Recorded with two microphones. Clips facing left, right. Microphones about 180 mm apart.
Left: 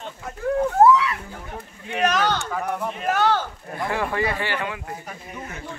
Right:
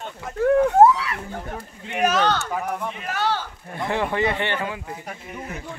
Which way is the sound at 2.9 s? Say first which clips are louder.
Left 7 dB; 50° left (ahead or behind).